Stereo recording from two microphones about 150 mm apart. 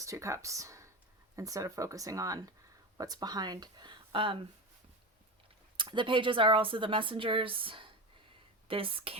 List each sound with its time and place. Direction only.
0.0 s speech: 20° right (ahead or behind)
5.7 s a woman's voice: 30° right (ahead or behind)